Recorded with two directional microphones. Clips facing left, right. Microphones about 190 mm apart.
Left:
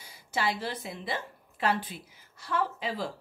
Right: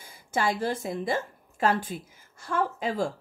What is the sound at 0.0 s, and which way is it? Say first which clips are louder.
A woman's voice: right 3 dB; 50° right (ahead or behind).